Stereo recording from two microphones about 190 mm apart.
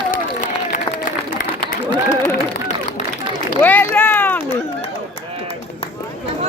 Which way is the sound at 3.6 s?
10° left (ahead or behind).